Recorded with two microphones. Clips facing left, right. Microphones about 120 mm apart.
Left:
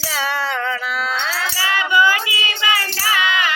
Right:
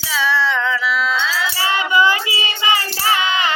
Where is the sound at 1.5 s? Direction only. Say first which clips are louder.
Even; 25° right (ahead or behind).